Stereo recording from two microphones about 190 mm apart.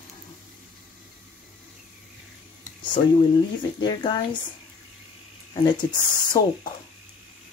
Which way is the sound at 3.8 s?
25° left (ahead or behind).